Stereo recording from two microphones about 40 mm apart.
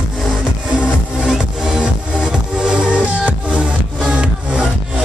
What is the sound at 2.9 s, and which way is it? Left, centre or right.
Music, right.